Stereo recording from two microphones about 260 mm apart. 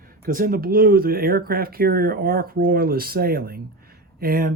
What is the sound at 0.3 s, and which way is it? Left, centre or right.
Speech, right.